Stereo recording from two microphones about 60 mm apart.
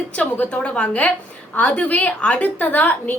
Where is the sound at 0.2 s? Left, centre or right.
Left.